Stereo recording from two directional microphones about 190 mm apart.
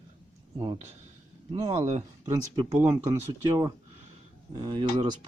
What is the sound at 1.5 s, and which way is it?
Speech, 25° right (ahead or behind).